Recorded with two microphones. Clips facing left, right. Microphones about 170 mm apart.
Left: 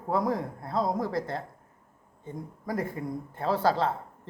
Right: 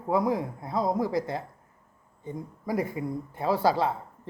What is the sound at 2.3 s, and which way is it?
Speech, 10° right (ahead or behind).